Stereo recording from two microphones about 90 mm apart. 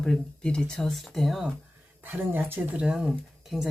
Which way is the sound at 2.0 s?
20° right (ahead or behind).